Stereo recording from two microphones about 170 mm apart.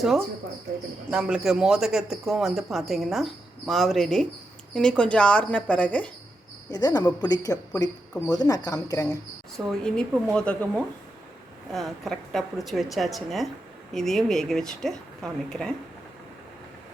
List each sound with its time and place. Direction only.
1.1 s a woman's voice: 5° right (ahead or behind)
6.7 s a woman's voice: 25° left (ahead or behind)
9.6 s a woman's voice: 5° left (ahead or behind)